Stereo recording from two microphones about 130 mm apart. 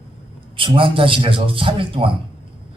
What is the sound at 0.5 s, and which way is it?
A man's voice, 40° right (ahead or behind).